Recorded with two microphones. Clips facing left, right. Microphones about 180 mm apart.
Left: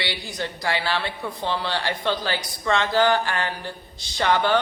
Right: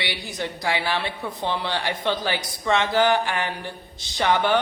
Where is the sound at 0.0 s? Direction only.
15° right (ahead or behind).